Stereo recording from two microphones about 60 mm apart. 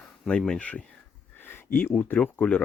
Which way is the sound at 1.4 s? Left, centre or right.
Left.